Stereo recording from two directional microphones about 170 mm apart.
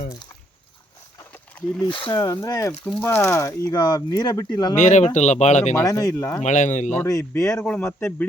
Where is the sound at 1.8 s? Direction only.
30° left (ahead or behind).